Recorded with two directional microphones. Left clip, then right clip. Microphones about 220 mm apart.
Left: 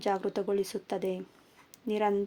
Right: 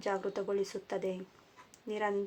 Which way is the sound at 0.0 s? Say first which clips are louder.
Left 4 dB; 45° left (ahead or behind).